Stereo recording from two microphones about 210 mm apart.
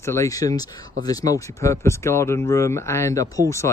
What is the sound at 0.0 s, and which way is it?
Speech, 15° left (ahead or behind).